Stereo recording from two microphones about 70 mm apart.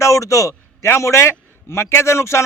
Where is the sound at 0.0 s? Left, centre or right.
Left.